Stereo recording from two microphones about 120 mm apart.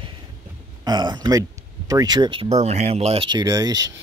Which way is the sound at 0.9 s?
35° right (ahead or behind).